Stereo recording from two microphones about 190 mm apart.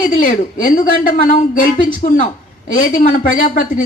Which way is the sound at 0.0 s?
45° left (ahead or behind).